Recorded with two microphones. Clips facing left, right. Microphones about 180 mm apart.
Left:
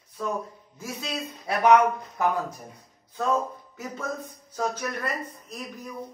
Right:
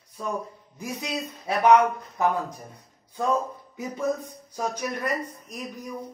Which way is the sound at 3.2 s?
15° right (ahead or behind).